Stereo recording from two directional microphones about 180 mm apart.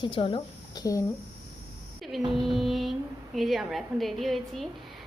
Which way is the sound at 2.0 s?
Centre (ahead or behind).